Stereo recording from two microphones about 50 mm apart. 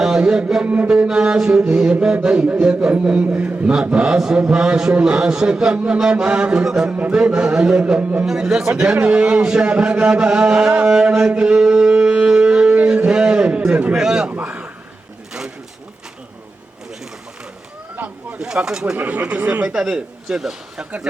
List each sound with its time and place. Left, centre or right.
0.2 s mantra: centre
0.6 s mantra: right
0.9 s mantra: centre
2.9 s speech: right
6.0 s mantra: centre
7.3 s speech: right
8.2 s mantra: centre
9.0 s speech: right
10.7 s music: right
13.9 s mantra: centre
14.4 s a sound: right
18.3 s mantra: centre
18.9 s speech: right
19.7 s mantra: centre